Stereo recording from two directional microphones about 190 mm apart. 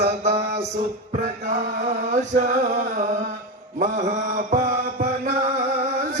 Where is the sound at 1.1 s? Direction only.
45° right (ahead or behind).